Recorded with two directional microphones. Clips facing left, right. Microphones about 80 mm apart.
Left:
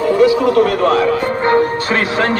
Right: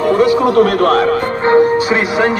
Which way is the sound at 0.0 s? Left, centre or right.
Right.